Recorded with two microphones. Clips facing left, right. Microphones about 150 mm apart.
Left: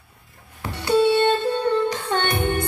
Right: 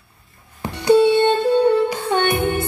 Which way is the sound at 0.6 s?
15° right (ahead or behind).